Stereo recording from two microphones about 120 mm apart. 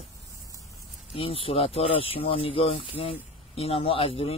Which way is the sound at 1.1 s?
50° left (ahead or behind).